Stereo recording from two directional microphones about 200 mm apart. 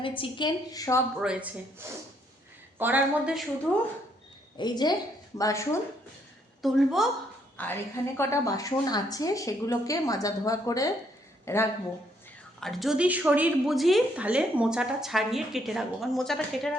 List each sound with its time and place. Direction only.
0.0 s a woman's voice: 25° left (ahead or behind)
1.2 s speech: 5° right (ahead or behind)
4.5 s a woman's voice: 20° left (ahead or behind)
6.6 s a woman's voice: centre (ahead or behind)
7.5 s a woman's voice: 10° left (ahead or behind)
12.5 s a woman's voice: centre (ahead or behind)